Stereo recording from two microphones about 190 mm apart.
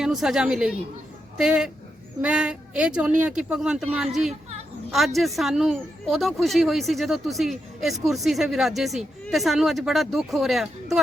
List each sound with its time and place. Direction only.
0.0 s speech: centre (ahead or behind)
4.3 s chatter: 35° right (ahead or behind)
4.9 s speech: centre (ahead or behind)